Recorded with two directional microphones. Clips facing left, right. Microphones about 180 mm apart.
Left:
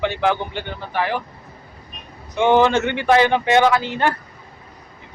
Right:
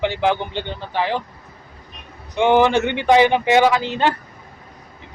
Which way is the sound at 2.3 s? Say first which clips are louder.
Even; 15° right (ahead or behind).